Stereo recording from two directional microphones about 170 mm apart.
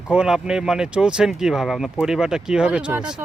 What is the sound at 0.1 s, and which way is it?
Speech, 5° right (ahead or behind).